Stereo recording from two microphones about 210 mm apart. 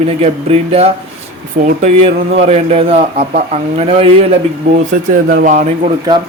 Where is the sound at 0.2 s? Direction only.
30° right (ahead or behind).